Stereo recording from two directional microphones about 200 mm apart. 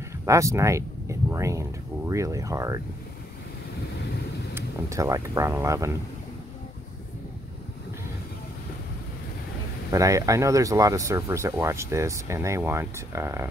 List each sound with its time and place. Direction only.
0.2 s speech: 15° right (ahead or behind)
4.6 s speech: 15° right (ahead or behind)
9.8 s speech: 15° right (ahead or behind)